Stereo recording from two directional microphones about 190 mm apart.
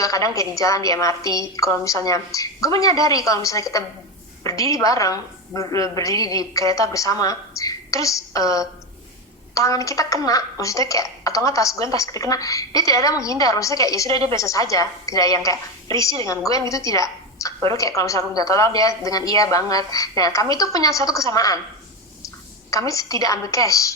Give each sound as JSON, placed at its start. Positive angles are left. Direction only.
{"t": 0.0, "sound": "a woman's voice", "side_deg": 15}
{"t": 22.9, "sound": "a woman's voice", "side_deg": 15}